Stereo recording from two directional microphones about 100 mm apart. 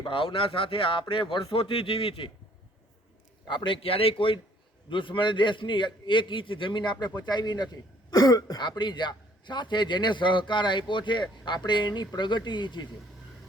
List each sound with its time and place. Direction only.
0.0 s speech: 60° left (ahead or behind)
3.4 s speech: 50° left (ahead or behind); by 4.4 s 65° left (ahead or behind)
4.9 s a man's voice: 55° left (ahead or behind)